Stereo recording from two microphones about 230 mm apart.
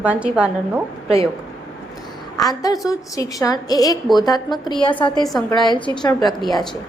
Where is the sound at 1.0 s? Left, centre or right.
Right.